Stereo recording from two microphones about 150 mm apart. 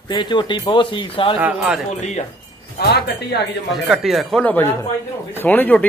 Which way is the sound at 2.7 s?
90° left.